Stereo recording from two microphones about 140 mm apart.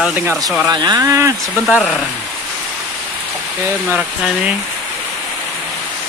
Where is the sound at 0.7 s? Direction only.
30° right (ahead or behind).